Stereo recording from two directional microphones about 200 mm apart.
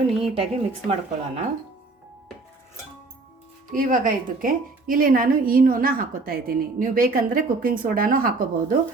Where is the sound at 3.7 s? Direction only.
45° right (ahead or behind).